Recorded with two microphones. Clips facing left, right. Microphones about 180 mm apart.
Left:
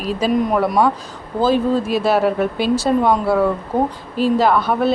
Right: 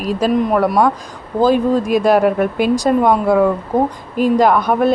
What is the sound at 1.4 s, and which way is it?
Speech, 15° right (ahead or behind).